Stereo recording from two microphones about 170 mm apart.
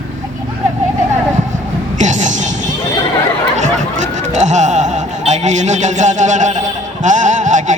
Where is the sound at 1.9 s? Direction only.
45° right (ahead or behind).